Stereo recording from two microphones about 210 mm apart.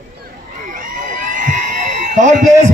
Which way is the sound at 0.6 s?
40° right (ahead or behind).